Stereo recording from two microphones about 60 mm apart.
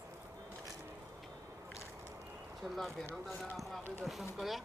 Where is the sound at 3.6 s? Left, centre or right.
Centre.